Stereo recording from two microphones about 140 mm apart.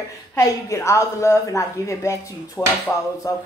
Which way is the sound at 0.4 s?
20° left (ahead or behind).